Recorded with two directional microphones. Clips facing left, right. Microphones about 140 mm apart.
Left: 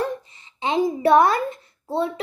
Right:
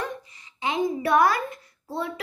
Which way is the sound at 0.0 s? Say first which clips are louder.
Left 6 dB; 30° left (ahead or behind).